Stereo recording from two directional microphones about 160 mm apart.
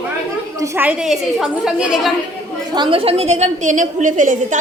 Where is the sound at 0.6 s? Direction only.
15° right (ahead or behind).